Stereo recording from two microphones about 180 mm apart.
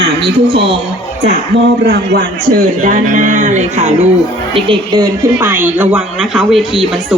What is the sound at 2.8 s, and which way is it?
A man's voice, 45° right (ahead or behind).